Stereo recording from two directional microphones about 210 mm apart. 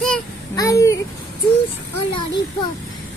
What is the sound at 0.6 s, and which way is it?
Speech, 15° left (ahead or behind).